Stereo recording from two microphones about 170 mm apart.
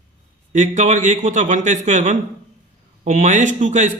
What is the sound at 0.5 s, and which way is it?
Speech, 45° right (ahead or behind).